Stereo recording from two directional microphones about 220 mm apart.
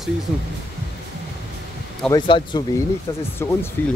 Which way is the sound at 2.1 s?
20° left (ahead or behind).